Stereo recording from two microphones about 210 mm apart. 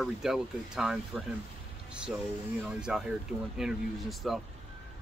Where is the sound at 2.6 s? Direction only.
5° right (ahead or behind).